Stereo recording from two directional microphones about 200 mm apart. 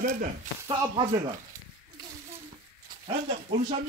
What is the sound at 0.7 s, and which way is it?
Speech, 20° right (ahead or behind).